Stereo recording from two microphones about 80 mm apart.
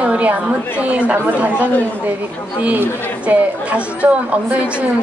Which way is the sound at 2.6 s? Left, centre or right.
Centre.